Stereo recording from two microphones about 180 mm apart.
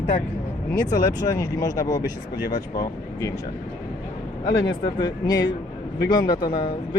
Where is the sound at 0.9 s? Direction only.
20° left (ahead or behind).